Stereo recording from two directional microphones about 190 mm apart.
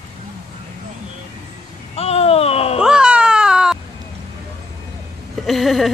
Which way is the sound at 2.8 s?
5° right (ahead or behind).